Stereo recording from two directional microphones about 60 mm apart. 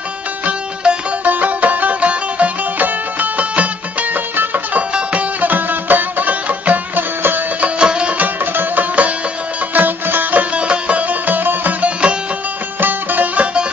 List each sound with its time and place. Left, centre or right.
0.5 s music: right
7.8 s music: centre; by 10.4 s right
10.5 s music: centre